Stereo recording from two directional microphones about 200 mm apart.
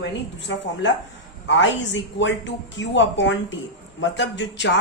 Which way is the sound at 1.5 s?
65° left (ahead or behind).